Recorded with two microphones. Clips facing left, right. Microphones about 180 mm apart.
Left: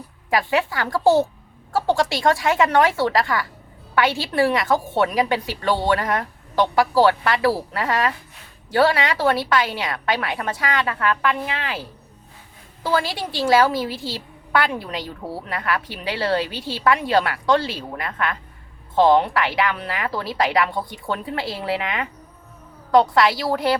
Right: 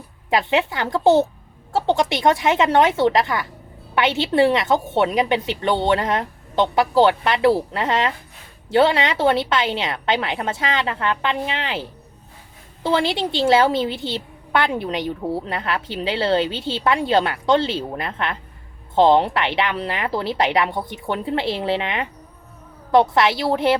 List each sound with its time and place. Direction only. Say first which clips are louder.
0.3 s a woman's voice: right 1 dB; 20° right (ahead or behind)